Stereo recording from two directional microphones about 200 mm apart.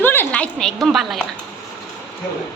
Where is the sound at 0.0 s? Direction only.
10° left (ahead or behind).